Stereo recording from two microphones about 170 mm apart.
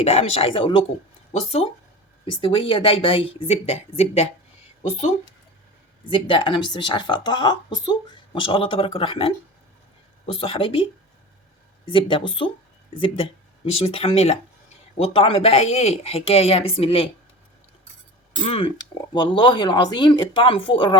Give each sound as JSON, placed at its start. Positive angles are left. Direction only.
{"t": 0.0, "sound": "speech", "side_deg": 40}
{"t": 6.1, "sound": "speech", "side_deg": 30}
{"t": 11.9, "sound": "speech", "side_deg": 30}
{"t": 18.4, "sound": "speech", "side_deg": 30}